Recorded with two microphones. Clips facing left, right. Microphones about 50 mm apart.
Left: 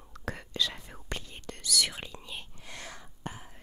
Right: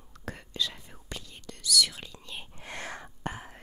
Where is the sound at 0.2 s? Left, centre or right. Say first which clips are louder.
Left 1 dB; left.